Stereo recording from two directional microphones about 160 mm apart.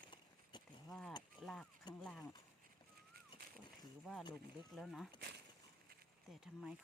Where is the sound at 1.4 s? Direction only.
30° left (ahead or behind).